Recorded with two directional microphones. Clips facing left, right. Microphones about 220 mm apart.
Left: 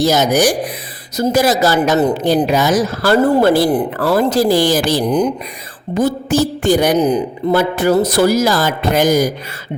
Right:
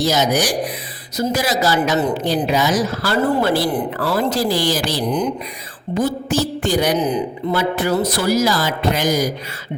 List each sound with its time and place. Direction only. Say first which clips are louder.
0.0 s speech: left 5 dB; 50° left (ahead or behind)